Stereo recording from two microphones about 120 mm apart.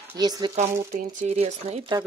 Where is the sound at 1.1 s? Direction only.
70° right (ahead or behind).